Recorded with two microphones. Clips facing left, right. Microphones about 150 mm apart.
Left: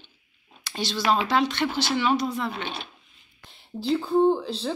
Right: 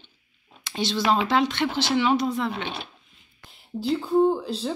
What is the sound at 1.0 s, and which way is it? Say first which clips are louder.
Speech: right 1 dB; 20° right (ahead or behind).